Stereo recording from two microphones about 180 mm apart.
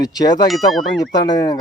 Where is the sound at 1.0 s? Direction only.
20° left (ahead or behind).